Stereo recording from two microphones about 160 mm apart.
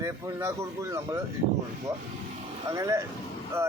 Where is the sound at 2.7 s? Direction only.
20° right (ahead or behind).